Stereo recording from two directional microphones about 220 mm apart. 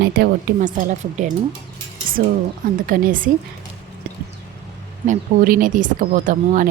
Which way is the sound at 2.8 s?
40° right (ahead or behind).